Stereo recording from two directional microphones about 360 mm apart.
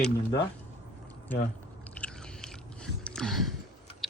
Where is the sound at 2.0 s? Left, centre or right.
Centre.